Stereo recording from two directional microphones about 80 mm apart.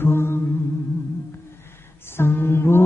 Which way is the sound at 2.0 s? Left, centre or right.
Left.